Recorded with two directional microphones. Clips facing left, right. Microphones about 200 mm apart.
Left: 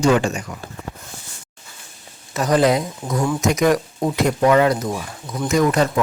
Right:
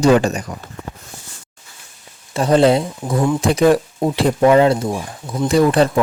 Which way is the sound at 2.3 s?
30° right (ahead or behind).